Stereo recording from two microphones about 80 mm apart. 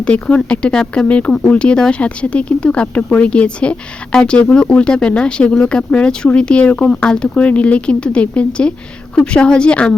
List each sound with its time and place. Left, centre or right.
0.0 s speech: centre